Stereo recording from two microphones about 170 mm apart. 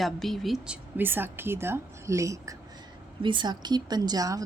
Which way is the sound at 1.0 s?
10° right (ahead or behind).